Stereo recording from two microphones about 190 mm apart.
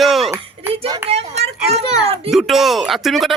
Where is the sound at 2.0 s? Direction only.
30° right (ahead or behind).